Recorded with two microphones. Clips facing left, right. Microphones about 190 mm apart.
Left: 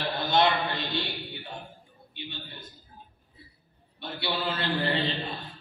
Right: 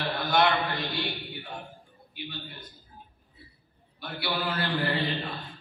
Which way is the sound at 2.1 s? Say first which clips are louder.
Right 1 dB; 25° left (ahead or behind).